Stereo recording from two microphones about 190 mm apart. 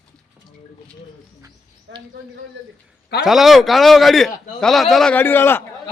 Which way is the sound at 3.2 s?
Centre (ahead or behind).